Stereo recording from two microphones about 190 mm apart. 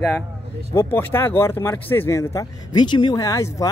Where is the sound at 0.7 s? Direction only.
10° left (ahead or behind).